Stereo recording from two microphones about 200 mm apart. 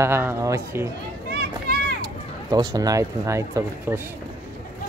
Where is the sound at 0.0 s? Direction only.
10° right (ahead or behind).